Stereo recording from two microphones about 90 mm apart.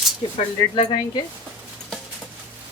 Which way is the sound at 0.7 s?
70° left (ahead or behind).